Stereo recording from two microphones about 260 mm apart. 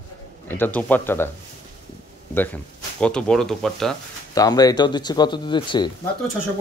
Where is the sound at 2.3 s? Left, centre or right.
Centre.